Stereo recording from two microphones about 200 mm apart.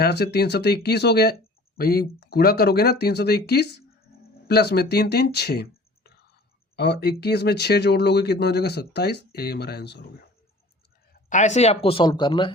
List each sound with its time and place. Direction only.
0.0 s speech: 55° left (ahead or behind)
11.1 s speech: 40° left (ahead or behind)